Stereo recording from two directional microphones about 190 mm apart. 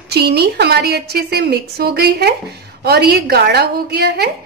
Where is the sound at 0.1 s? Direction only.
60° right (ahead or behind).